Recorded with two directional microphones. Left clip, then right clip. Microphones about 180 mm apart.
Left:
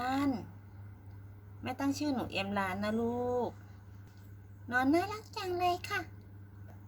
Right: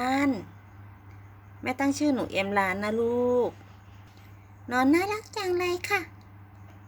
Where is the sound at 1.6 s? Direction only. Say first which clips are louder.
Right 8 dB; 30° right (ahead or behind).